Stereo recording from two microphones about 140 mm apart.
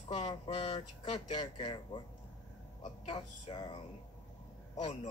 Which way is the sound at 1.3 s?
35° left (ahead or behind).